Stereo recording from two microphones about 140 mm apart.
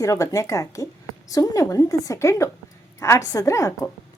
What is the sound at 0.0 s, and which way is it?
A woman's voice, 20° left (ahead or behind).